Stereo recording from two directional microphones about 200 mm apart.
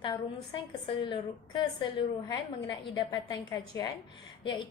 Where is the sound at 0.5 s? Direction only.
20° left (ahead or behind).